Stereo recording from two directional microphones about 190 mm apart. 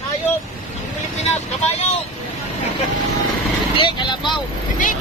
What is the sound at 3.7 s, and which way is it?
Speech, 25° left (ahead or behind).